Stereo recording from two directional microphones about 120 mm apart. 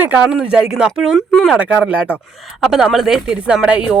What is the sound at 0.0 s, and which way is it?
Speech, 10° right (ahead or behind).